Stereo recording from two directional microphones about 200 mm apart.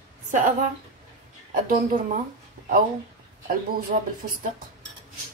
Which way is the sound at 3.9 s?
40° right (ahead or behind).